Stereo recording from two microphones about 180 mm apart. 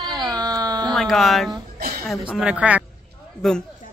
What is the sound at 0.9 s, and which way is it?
A man's voice, centre (ahead or behind).